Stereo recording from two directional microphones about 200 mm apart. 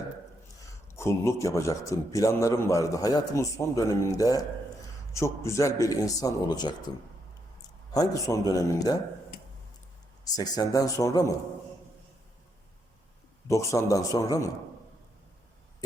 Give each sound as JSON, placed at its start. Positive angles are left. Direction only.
{"t": 0.9, "sound": "a man's voice", "side_deg": 15}
{"t": 7.9, "sound": "a man's voice", "side_deg": 20}
{"t": 10.3, "sound": "a man's voice", "side_deg": 20}
{"t": 13.5, "sound": "a man's voice", "side_deg": 15}